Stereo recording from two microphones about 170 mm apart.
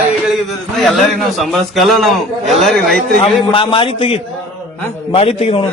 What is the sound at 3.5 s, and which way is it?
A man's voice, 30° left (ahead or behind).